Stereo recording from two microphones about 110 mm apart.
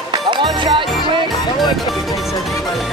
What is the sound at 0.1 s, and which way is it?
Music, 45° right (ahead or behind).